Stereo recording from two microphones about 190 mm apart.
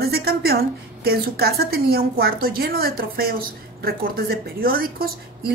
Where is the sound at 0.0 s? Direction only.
55° right (ahead or behind).